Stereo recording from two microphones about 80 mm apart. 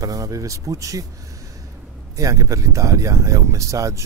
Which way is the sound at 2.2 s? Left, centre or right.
Right.